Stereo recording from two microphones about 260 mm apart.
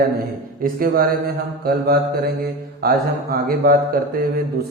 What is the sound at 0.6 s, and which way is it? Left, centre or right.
Speech, right.